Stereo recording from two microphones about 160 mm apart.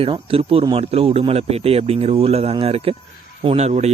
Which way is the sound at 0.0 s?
35° right (ahead or behind).